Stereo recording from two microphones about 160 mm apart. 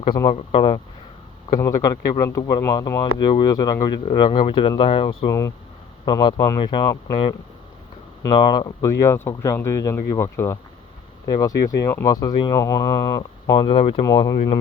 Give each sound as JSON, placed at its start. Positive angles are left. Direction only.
{"t": 0.3, "sound": "speech", "side_deg": 30}
{"t": 1.5, "sound": "speech", "side_deg": 20}
{"t": 8.4, "sound": "speech", "side_deg": 30}
{"t": 14.0, "sound": "speech", "side_deg": 25}